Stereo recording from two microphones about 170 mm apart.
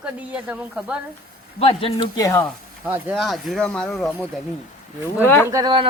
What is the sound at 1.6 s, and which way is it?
Speech, 35° left (ahead or behind).